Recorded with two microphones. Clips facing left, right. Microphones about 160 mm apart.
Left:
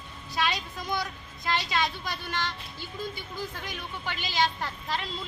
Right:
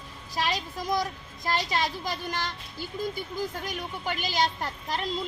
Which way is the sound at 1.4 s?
40° right (ahead or behind).